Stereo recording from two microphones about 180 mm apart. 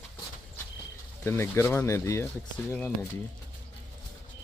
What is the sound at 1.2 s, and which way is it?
Speech, 15° left (ahead or behind).